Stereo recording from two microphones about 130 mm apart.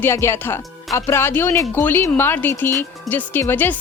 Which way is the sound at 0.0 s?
20° left (ahead or behind).